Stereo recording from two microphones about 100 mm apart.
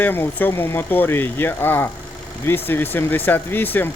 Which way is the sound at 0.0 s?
20° left (ahead or behind).